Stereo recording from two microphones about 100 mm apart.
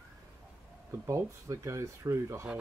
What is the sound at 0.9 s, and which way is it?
Speech, 30° right (ahead or behind).